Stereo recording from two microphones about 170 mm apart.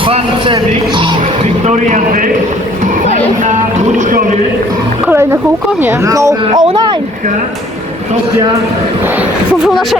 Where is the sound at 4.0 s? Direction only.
50° right (ahead or behind).